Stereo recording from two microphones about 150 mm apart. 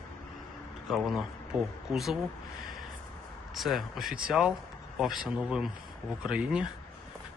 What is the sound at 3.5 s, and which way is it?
Speech, centre (ahead or behind).